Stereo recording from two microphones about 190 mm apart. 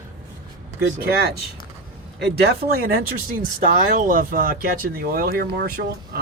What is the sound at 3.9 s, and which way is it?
Speech, 45° right (ahead or behind).